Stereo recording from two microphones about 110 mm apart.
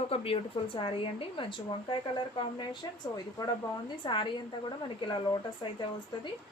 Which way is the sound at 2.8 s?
45° left (ahead or behind).